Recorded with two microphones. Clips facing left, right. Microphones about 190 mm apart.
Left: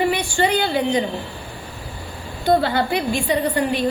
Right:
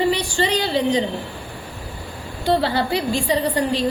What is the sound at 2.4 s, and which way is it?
A woman's voice, 30° right (ahead or behind).